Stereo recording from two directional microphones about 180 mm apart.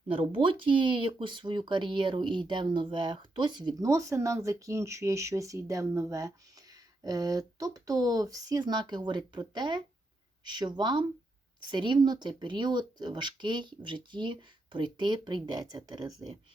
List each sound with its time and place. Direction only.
0.1 s speech: 30° right (ahead or behind)